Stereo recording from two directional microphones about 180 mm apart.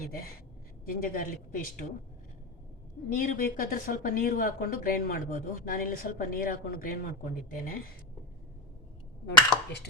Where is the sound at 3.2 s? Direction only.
50° left (ahead or behind).